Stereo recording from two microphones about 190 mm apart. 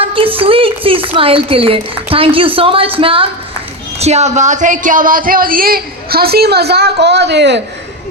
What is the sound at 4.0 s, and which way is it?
A woman's voice, 35° right (ahead or behind).